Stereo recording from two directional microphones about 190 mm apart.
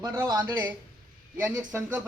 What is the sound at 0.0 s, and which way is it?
A man's voice, 15° right (ahead or behind).